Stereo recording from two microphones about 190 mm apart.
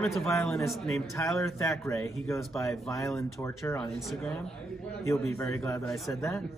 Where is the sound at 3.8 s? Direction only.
Centre (ahead or behind).